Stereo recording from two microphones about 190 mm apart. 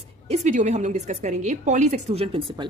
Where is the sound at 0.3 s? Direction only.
40° right (ahead or behind).